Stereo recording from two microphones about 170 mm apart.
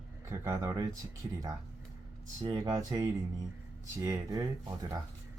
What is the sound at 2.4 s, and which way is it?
Speech, 20° right (ahead or behind).